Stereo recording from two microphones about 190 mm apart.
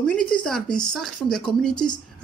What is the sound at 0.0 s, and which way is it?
A woman's voice, 5° left (ahead or behind).